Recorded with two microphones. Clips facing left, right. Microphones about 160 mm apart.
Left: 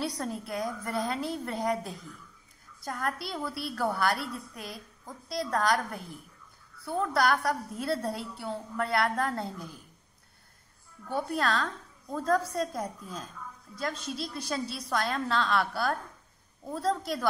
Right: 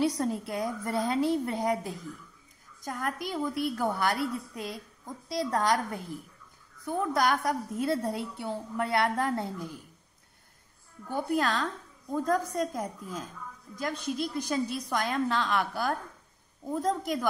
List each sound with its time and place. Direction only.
0.0 s a woman's voice: 20° right (ahead or behind)
11.1 s a woman's voice: 15° right (ahead or behind)